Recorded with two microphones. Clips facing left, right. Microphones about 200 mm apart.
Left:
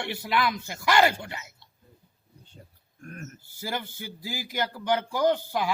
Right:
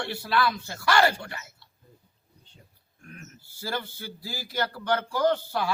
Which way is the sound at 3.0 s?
50° left (ahead or behind).